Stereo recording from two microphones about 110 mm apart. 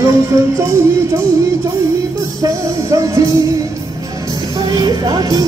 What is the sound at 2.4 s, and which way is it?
Speech, 30° right (ahead or behind).